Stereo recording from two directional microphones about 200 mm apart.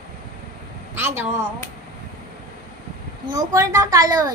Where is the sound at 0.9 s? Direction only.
10° right (ahead or behind).